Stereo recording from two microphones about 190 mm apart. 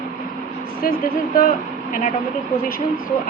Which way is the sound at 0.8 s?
50° left (ahead or behind).